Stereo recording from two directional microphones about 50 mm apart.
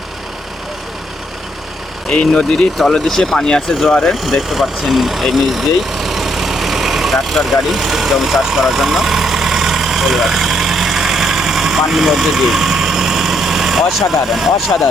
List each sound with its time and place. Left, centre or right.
2.1 s speech: centre
8.5 s vehicle: centre